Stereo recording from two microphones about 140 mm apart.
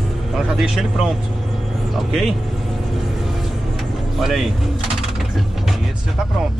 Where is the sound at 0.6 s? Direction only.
5° right (ahead or behind).